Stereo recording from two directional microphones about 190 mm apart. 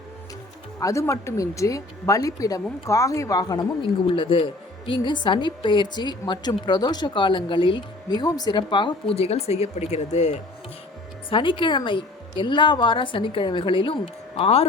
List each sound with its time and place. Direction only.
0.8 s a woman's voice: 15° left (ahead or behind); by 10.4 s 35° left (ahead or behind)
11.3 s a woman's voice: 25° left (ahead or behind)